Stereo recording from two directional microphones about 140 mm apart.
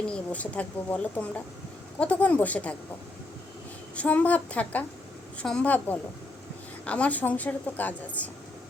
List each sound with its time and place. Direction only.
0.1 s a woman's voice: 10° left (ahead or behind)
3.9 s a woman's voice: 10° left (ahead or behind)